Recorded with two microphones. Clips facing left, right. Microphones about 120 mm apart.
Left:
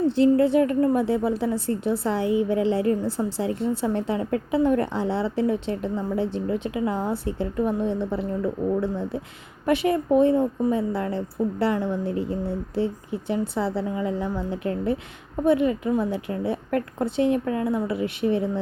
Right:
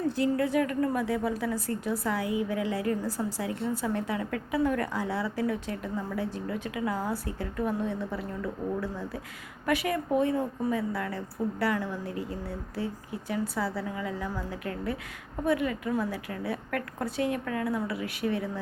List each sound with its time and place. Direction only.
0.0 s a woman's voice: 25° left (ahead or behind)